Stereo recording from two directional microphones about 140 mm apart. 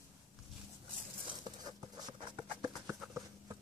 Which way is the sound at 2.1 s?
35° right (ahead or behind).